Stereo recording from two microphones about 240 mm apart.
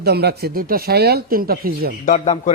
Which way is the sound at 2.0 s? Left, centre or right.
Left.